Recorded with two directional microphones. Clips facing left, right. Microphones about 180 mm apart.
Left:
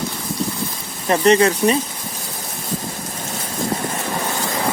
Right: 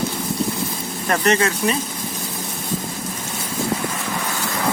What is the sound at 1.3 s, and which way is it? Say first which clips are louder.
Speech: left 6 dB; 35° left (ahead or behind).